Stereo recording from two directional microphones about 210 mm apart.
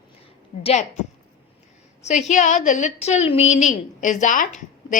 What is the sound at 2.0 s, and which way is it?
A woman's voice, 35° left (ahead or behind).